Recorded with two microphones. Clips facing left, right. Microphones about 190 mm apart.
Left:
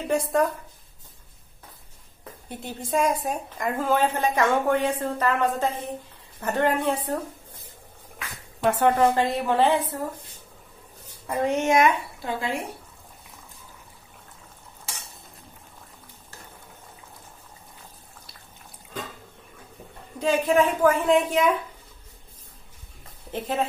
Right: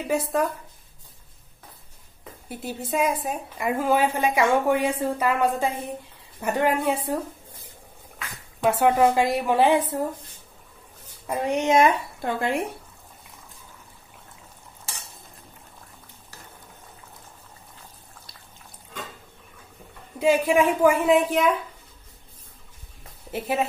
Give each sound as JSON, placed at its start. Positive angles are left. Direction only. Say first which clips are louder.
{"t": 0.1, "sound": "speech", "louder": "left 1 dB", "side_deg": 0}
{"t": 2.6, "sound": "a woman's voice", "louder": "even", "side_deg": -5}
{"t": 8.6, "sound": "a woman's voice", "louder": "right 1 dB", "side_deg": -10}
{"t": 11.2, "sound": "a woman's voice", "louder": "even", "side_deg": -15}
{"t": 12.2, "sound": "speech", "louder": "right 4 dB", "side_deg": -55}
{"t": 20.2, "sound": "a woman's voice", "louder": "right 1 dB", "side_deg": -10}
{"t": 23.3, "sound": "a woman's voice", "louder": "right 1 dB", "side_deg": -10}